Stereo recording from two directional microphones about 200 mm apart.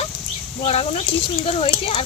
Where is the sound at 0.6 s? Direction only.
30° left (ahead or behind).